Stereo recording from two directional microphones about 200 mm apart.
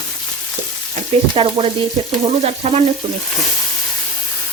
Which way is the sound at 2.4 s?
30° right (ahead or behind).